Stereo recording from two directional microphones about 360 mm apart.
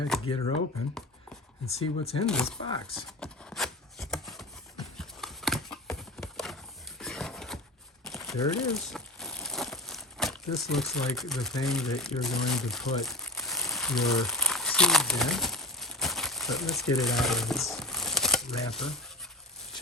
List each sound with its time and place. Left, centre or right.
1.6 s speech: centre
2.2 s speech: centre
2.9 s chopping: centre
4.9 s a sound: centre
8.0 s crumpling: centre